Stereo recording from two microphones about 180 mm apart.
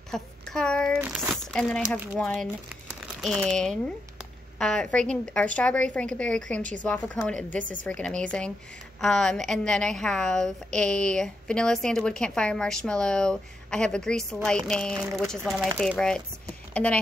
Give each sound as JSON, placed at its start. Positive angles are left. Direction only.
{"t": 0.1, "sound": "speech", "side_deg": 5}
{"t": 1.0, "sound": "speech", "side_deg": -10}
{"t": 1.3, "sound": "a woman's voice", "side_deg": 5}
{"t": 2.7, "sound": "crumpling", "side_deg": 0}
{"t": 4.6, "sound": "a woman's voice", "side_deg": 5}
{"t": 16.7, "sound": "speech", "side_deg": 5}